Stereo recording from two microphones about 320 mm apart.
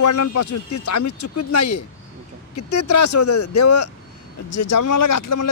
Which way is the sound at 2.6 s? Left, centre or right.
Left.